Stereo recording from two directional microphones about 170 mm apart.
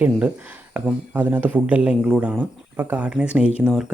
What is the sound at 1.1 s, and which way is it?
Speech, 10° right (ahead or behind).